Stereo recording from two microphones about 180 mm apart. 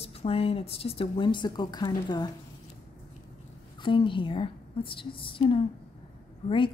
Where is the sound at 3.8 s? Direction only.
25° left (ahead or behind).